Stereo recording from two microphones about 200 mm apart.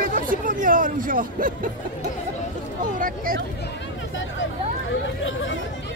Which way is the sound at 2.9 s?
45° right (ahead or behind).